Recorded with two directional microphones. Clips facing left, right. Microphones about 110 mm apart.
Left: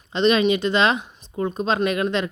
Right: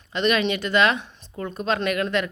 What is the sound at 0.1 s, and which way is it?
Speech, 25° left (ahead or behind).